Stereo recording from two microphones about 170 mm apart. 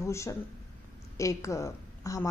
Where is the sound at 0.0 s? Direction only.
15° left (ahead or behind).